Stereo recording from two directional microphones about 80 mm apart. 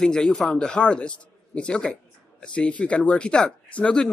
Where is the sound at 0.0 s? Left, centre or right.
Centre.